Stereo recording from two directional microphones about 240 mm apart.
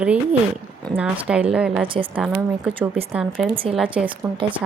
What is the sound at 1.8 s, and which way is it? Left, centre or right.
Speech, right.